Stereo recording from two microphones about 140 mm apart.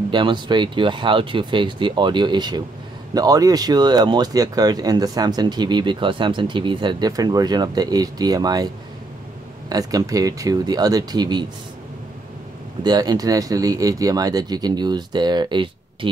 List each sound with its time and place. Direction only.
0.1 s speech: 35° right (ahead or behind)
12.8 s speech: 30° right (ahead or behind)